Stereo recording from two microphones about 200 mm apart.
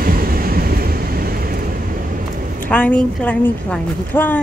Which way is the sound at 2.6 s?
5° left (ahead or behind).